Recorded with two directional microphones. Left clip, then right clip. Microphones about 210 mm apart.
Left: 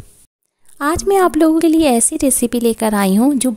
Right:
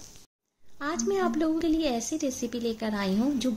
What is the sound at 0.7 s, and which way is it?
A woman's voice, 55° left (ahead or behind).